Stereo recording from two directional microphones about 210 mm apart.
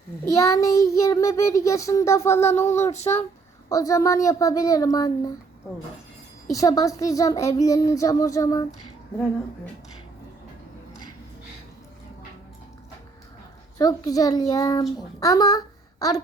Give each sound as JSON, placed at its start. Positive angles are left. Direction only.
{"t": 0.3, "sound": "child singing", "side_deg": 15}
{"t": 2.9, "sound": "speech", "side_deg": 30}
{"t": 3.7, "sound": "child singing", "side_deg": 15}
{"t": 6.5, "sound": "child singing", "side_deg": 15}
{"t": 13.7, "sound": "child singing", "side_deg": 20}